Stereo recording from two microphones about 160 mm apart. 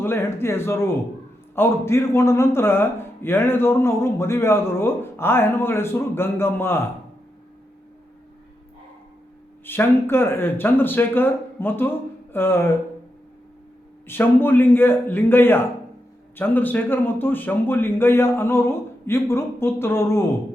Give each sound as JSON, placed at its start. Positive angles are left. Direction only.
{"t": 0.0, "sound": "a man's voice", "side_deg": 15}
{"t": 9.6, "sound": "a man's voice", "side_deg": 15}
{"t": 14.1, "sound": "a man's voice", "side_deg": 15}